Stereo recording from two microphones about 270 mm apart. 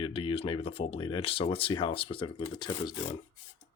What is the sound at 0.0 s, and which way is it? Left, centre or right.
Speech, centre.